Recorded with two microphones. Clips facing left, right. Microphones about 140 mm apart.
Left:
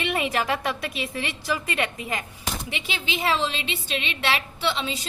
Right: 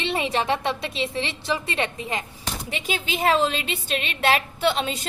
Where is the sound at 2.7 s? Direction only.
40° right (ahead or behind).